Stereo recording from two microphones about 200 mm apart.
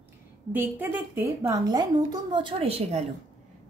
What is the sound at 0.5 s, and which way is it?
A woman's voice, 10° right (ahead or behind).